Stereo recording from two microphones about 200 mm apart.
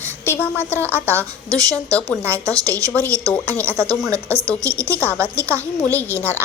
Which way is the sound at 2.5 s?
15° right (ahead or behind).